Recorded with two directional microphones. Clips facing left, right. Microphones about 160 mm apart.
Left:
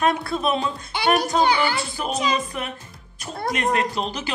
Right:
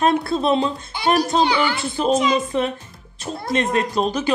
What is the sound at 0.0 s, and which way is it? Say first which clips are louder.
Speech: right 3 dB; 30° right (ahead or behind).